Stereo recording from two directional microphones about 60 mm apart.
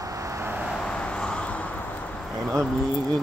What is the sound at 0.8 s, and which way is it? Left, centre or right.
Vehicle, centre.